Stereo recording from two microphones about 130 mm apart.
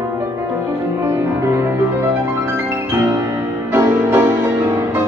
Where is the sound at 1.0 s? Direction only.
20° right (ahead or behind).